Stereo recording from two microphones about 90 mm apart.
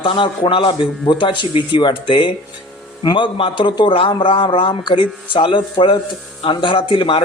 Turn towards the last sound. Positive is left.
turn(degrees=75)  # may be behind; listen again after turning